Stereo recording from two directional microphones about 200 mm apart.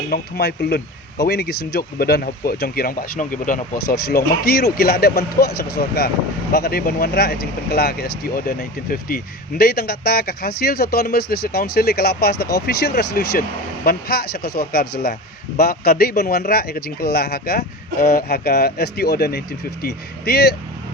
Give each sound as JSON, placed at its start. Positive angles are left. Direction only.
{"t": 0.1, "sound": "speech", "side_deg": 55}